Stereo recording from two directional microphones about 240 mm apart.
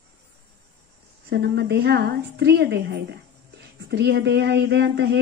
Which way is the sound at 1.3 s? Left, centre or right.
Right.